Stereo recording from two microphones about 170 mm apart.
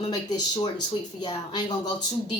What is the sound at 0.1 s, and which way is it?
A woman's voice, 25° left (ahead or behind).